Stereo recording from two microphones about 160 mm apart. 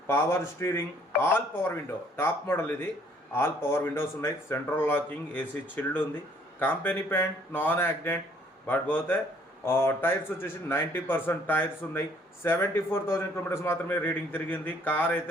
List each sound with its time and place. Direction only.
0.1 s speech: 15° left (ahead or behind)